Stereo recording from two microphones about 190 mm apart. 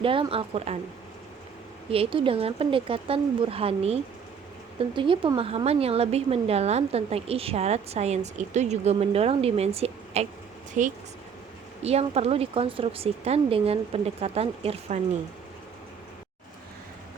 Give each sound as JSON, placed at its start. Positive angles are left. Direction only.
{"t": 0.0, "sound": "speech", "side_deg": -30}
{"t": 1.9, "sound": "a woman's voice", "side_deg": -30}